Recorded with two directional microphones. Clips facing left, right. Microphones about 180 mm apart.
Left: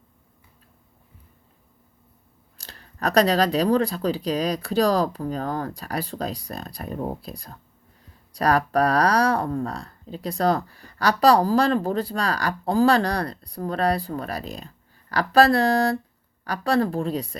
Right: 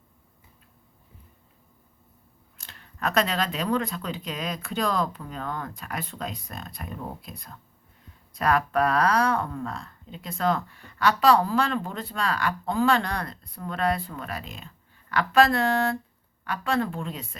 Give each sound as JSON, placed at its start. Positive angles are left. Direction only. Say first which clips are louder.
{"t": 2.6, "sound": "speech", "louder": "left 2 dB", "side_deg": 35}